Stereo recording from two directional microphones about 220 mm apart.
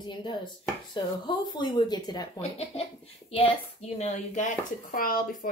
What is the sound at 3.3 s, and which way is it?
Speech, 25° left (ahead or behind).